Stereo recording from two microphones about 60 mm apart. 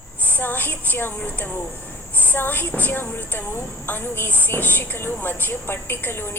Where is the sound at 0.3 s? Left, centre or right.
Left.